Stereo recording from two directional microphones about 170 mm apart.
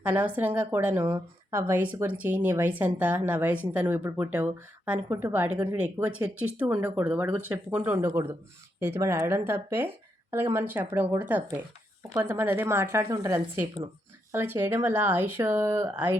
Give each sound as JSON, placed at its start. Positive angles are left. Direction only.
{"t": 0.0, "sound": "a woman's voice", "side_deg": -10}
{"t": 1.0, "sound": "speech", "side_deg": -25}
{"t": 1.5, "sound": "a woman's voice", "side_deg": -15}